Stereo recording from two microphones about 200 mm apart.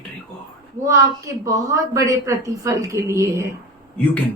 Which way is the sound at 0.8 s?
15° right (ahead or behind).